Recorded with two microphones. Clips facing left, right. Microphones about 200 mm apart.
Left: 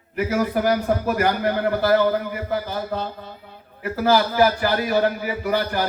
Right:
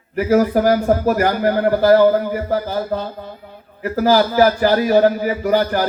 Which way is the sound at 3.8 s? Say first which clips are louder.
Right 4 dB; 40° right (ahead or behind).